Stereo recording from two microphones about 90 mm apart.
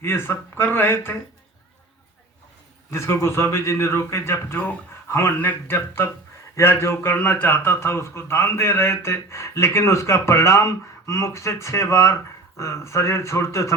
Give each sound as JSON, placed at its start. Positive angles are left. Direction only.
{"t": 0.0, "sound": "a man's voice", "side_deg": 25}
{"t": 2.9, "sound": "a man's voice", "side_deg": 30}